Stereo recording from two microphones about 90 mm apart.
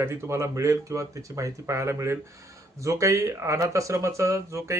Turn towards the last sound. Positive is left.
turn(degrees=-35)  # may be behind; listen again after turning